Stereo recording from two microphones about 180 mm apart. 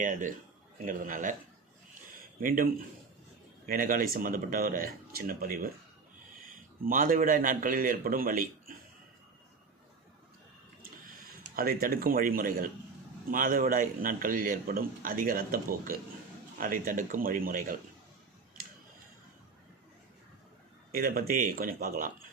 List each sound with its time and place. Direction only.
0.0 s a man's voice: 45° right (ahead or behind)
2.1 s a sound: 50° right (ahead or behind)
3.7 s a man's voice: 50° right (ahead or behind)
11.5 s a man's voice: 50° right (ahead or behind)
18.6 s a sound: 55° right (ahead or behind)
20.9 s a man's voice: 55° right (ahead or behind)